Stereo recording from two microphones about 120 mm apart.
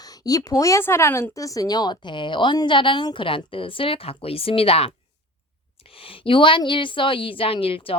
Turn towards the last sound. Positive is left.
turn(degrees=50)  # may be behind; listen again after turning